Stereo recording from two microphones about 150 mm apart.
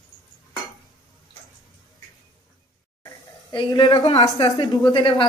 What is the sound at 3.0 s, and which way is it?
Speech, 30° left (ahead or behind).